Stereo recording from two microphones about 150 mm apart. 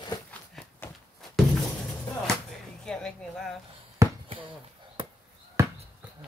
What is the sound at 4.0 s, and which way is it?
Basketball bounce, 20° right (ahead or behind).